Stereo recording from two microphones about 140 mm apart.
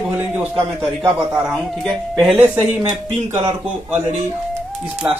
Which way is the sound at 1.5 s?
Centre (ahead or behind).